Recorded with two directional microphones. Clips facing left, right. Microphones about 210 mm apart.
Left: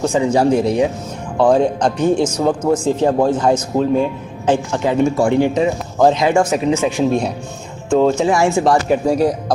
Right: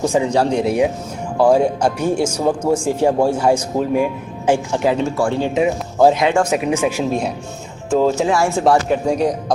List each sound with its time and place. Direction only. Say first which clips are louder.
0.3 s speech: left 3 dB; 5° left (ahead or behind)
0.6 s speech: left 1 dB; 10° right (ahead or behind)
5.0 s speech: left 4 dB; 15° left (ahead or behind)
5.5 s speech: even; 5° right (ahead or behind)
6.2 s speech: left 1 dB; 5° left (ahead or behind)
6.7 s speech: left 3 dB; 10° right (ahead or behind)
8.3 s speech: left 2 dB; 15° left (ahead or behind)
8.6 s speech: left 1 dB; centre (ahead or behind)